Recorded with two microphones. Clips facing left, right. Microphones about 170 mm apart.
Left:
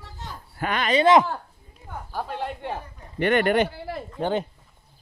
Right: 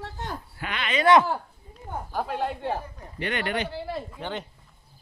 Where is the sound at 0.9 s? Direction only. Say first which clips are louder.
Left 2 dB; 25° left (ahead or behind).